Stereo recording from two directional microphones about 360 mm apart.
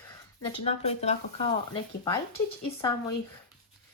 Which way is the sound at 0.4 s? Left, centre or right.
Centre.